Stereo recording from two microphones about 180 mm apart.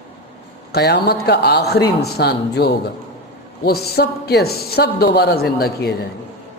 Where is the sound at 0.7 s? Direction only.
65° left (ahead or behind).